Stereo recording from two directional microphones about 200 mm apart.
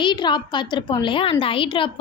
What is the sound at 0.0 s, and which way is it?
A woman's voice, 20° left (ahead or behind).